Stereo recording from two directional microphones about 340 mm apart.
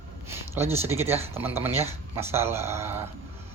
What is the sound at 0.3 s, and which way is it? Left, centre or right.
Speech, centre.